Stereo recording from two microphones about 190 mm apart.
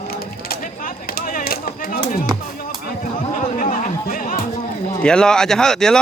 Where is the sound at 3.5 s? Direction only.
45° left (ahead or behind).